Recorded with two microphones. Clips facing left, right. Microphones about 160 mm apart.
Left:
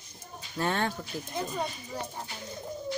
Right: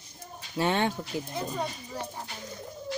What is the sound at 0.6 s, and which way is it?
Speech, 15° right (ahead or behind).